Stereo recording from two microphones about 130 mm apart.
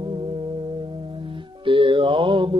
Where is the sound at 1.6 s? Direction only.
40° right (ahead or behind).